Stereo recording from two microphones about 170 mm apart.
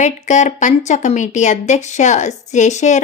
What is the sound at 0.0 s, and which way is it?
Speech, 45° left (ahead or behind).